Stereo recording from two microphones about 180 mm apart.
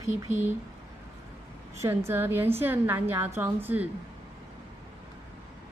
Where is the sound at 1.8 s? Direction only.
15° right (ahead or behind).